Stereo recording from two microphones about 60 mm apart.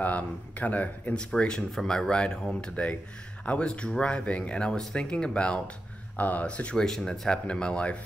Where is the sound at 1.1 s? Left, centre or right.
Centre.